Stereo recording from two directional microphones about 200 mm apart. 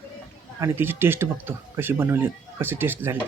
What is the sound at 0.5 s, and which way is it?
Speech, 15° right (ahead or behind).